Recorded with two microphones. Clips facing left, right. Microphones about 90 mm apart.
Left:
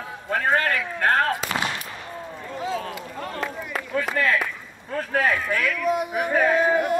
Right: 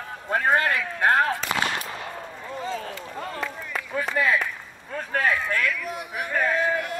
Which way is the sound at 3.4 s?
Centre (ahead or behind).